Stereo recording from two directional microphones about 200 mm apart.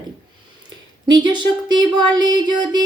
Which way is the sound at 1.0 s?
20° right (ahead or behind).